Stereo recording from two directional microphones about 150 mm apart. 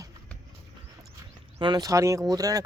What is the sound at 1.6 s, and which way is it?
Speech, 30° right (ahead or behind).